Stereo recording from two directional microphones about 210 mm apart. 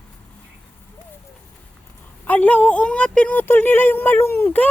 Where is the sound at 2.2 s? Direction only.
5° left (ahead or behind).